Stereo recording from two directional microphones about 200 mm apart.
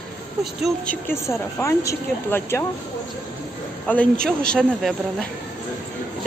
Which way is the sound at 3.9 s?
5° left (ahead or behind).